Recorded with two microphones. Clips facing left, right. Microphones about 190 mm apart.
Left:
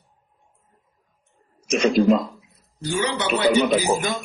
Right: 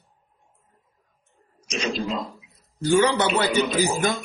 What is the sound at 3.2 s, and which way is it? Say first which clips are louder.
Speech: left 3 dB; 50° left (ahead or behind).